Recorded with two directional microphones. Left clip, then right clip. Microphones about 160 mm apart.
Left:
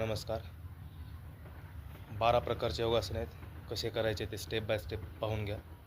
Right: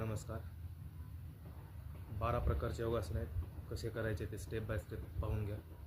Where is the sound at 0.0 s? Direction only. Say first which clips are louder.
Left 10 dB; 20° right (ahead or behind).